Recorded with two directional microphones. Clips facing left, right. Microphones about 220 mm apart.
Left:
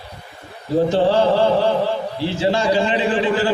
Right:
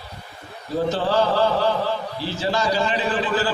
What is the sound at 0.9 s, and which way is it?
A man's voice, 25° left (ahead or behind).